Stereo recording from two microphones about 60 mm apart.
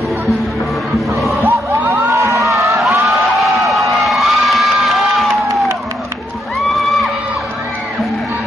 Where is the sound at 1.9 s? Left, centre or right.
Right.